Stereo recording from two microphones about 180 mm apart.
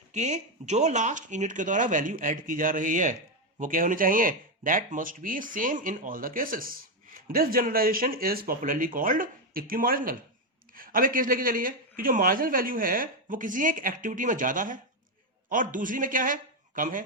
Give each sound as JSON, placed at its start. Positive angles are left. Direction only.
{"t": 0.1, "sound": "a man's voice", "side_deg": -40}